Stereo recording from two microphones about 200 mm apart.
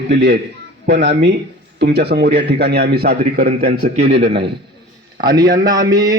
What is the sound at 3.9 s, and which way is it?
Speech, 35° right (ahead or behind).